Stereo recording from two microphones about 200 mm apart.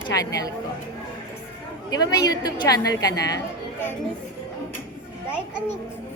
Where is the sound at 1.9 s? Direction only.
20° left (ahead or behind).